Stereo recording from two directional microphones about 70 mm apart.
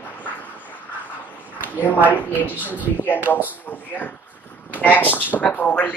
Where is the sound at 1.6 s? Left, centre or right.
Left.